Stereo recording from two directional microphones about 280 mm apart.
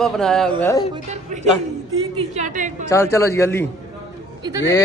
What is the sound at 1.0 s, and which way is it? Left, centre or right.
A woman's voice, right.